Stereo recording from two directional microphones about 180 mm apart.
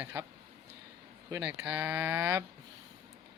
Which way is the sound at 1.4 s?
10° right (ahead or behind).